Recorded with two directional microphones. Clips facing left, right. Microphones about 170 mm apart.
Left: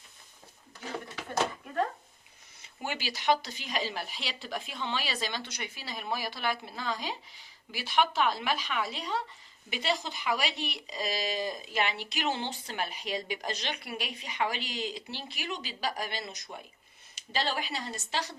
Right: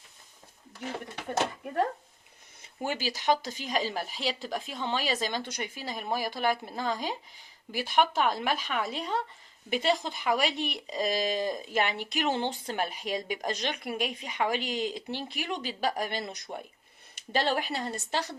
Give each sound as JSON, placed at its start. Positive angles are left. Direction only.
{"t": 2.8, "sound": "speech", "side_deg": -45}